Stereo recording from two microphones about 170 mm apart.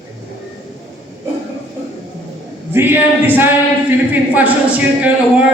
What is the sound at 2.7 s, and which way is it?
A man's voice, 10° right (ahead or behind).